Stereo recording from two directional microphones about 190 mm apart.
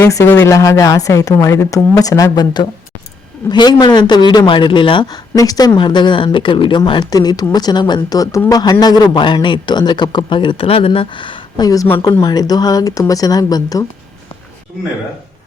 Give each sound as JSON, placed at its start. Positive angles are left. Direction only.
{"t": 0.0, "sound": "a man's voice", "side_deg": 15}